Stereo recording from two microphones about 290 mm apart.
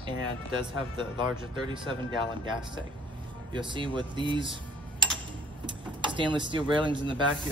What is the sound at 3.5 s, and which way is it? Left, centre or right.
Speech, centre.